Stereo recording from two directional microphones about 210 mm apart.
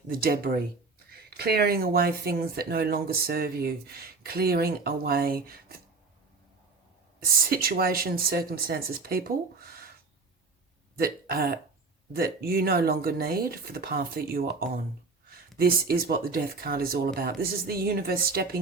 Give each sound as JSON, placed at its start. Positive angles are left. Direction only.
{"t": 0.1, "sound": "speech", "side_deg": -45}
{"t": 7.5, "sound": "speech", "side_deg": -45}
{"t": 10.9, "sound": "speech", "side_deg": -45}